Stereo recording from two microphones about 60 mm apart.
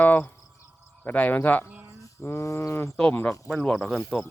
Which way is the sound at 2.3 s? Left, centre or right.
Left.